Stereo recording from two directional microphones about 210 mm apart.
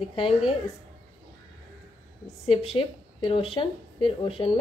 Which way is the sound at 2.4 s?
30° left (ahead or behind).